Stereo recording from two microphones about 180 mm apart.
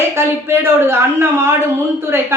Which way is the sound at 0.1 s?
15° right (ahead or behind).